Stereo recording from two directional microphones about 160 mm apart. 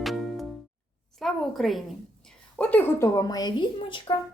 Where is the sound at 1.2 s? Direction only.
Centre (ahead or behind); by 4.1 s 30° left (ahead or behind).